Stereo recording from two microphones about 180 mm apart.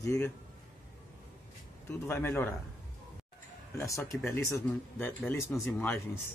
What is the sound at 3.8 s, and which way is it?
Speech, 15° left (ahead or behind).